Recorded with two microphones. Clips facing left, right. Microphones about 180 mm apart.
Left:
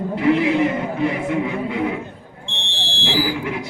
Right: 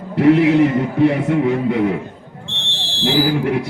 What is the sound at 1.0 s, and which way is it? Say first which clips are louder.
Music: right 7 dB; 60° right (ahead or behind).